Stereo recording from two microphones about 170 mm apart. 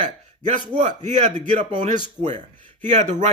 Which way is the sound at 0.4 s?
45° right (ahead or behind).